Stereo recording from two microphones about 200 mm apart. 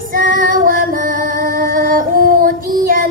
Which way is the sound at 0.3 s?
45° right (ahead or behind).